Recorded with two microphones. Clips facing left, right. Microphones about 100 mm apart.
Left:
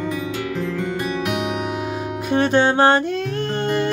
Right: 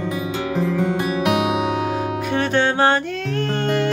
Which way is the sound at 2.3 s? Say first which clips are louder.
Left 3 dB; 20° left (ahead or behind).